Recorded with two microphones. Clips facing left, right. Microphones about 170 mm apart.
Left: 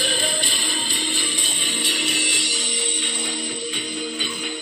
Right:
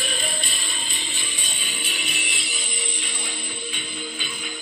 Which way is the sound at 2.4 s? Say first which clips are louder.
Left 5 dB; 90° left.